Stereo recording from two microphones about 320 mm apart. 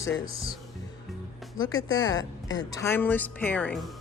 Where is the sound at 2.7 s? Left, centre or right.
Centre.